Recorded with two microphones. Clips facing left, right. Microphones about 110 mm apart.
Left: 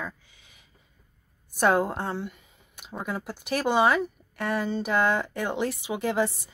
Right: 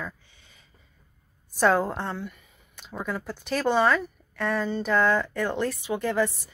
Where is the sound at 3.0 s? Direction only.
10° left (ahead or behind).